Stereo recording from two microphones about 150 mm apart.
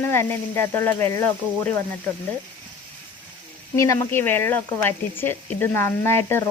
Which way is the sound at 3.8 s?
20° left (ahead or behind).